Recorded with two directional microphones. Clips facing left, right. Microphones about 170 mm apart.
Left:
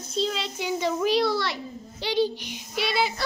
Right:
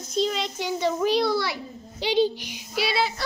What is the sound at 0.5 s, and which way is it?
A child's voice, 10° left (ahead or behind).